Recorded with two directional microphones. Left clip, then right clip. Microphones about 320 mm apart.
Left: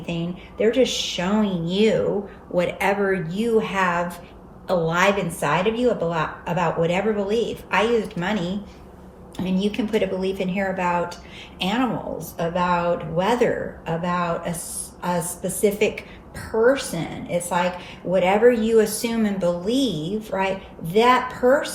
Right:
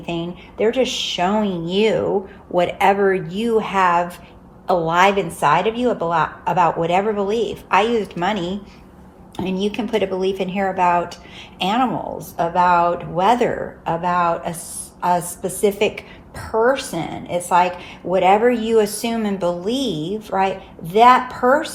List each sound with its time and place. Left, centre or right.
0.0 s speech: centre
9.6 s speech: centre